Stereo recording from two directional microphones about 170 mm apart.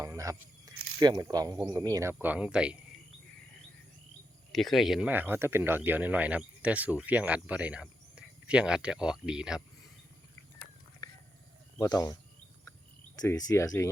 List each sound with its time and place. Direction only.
0.0 s speech: 20° right (ahead or behind)
2.2 s speech: 5° right (ahead or behind)
4.5 s speech: centre (ahead or behind)
11.0 s a sound: 20° left (ahead or behind)
11.8 s speech: 20° left (ahead or behind)
13.2 s speech: 20° left (ahead or behind)